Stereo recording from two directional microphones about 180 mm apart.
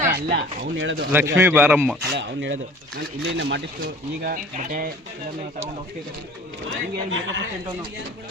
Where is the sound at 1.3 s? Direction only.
10° right (ahead or behind).